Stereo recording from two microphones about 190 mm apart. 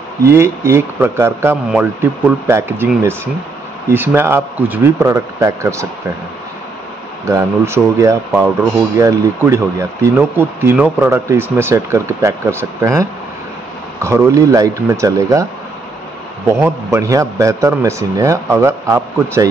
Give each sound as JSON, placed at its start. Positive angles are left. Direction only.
{"t": 0.3, "sound": "speech", "side_deg": -15}
{"t": 3.9, "sound": "speech", "side_deg": -10}
{"t": 7.2, "sound": "speech", "side_deg": -15}
{"t": 14.0, "sound": "speech", "side_deg": -15}
{"t": 16.6, "sound": "speech", "side_deg": -15}